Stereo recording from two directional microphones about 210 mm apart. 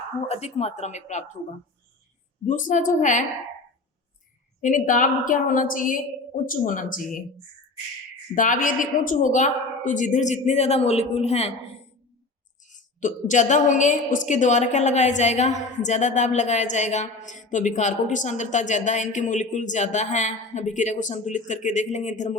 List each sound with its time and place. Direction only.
0.3 s a woman's voice: 30° left (ahead or behind)
2.4 s a woman's voice: 35° left (ahead or behind)
4.6 s a woman's voice: 40° left (ahead or behind)
8.4 s a woman's voice: 40° left (ahead or behind)